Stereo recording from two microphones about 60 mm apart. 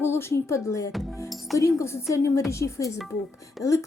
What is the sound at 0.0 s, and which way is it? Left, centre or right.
A woman's voice, left.